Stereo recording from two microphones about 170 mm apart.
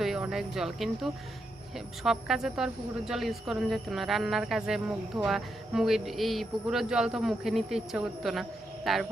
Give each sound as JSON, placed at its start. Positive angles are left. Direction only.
{"t": 0.0, "sound": "speech", "side_deg": 0}